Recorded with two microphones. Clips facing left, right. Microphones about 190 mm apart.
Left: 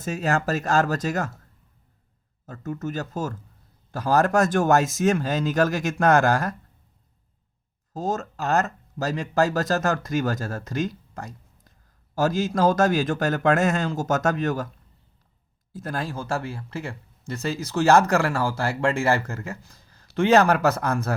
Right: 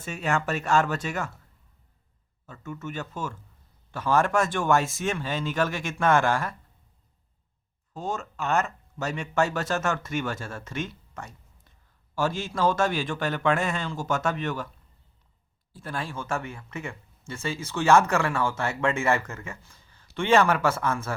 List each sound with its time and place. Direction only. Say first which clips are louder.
0.0 s speech: left 4 dB; 40° left (ahead or behind)
2.5 s speech: left 6 dB; 40° left (ahead or behind)
7.9 s speech: left 5 dB; 40° left (ahead or behind)
15.7 s speech: left 4 dB; 40° left (ahead or behind)